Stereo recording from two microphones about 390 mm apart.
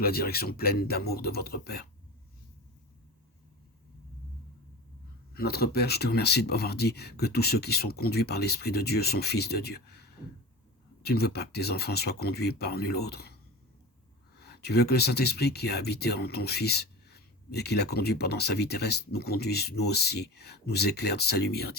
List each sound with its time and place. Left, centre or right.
0.0 s speech: left
5.3 s speech: left
14.4 s speech: left